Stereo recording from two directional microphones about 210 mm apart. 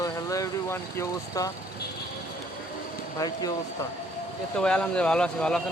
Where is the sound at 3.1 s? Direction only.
15° left (ahead or behind).